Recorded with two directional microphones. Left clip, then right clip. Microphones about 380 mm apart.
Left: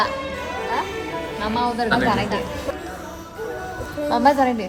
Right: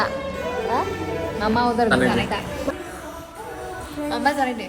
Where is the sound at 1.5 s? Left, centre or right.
Centre.